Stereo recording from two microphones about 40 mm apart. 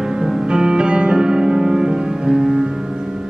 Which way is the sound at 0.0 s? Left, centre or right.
Centre.